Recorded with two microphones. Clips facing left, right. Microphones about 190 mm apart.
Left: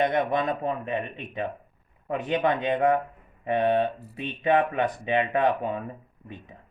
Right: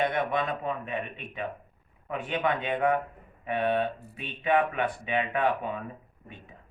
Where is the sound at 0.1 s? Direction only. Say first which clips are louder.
Left 4 dB; 40° left (ahead or behind).